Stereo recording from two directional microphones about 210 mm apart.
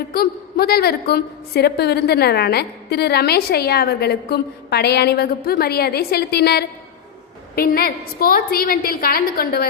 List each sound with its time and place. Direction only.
0.1 s a woman's voice: 45° left (ahead or behind)